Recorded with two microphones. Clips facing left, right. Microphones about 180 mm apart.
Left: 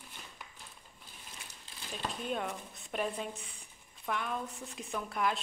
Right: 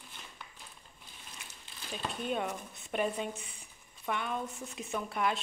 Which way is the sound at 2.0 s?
Centre (ahead or behind).